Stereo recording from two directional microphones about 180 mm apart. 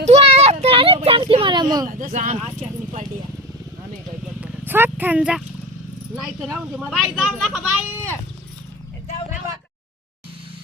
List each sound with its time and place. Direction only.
0.0 s a sound: 35° right (ahead or behind)
1.9 s speech: 45° right (ahead or behind)
4.4 s vehicle: 10° right (ahead or behind)
6.1 s speech: 5° right (ahead or behind)